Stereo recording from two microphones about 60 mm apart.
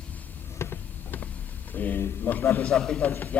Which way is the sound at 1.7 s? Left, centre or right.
Left.